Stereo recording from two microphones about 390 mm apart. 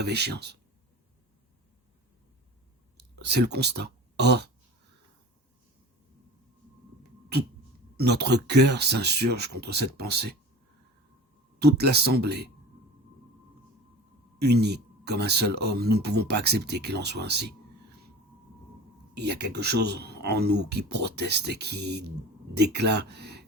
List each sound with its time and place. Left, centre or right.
0.0 s speech: right
3.0 s speech: right
7.9 s speech: right
11.6 s speech: right
14.3 s speech: right
19.1 s speech: right